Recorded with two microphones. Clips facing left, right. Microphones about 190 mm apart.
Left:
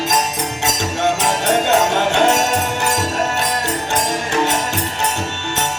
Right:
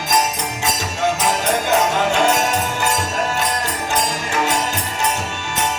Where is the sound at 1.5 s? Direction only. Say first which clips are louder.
Left 4 dB; 70° left (ahead or behind).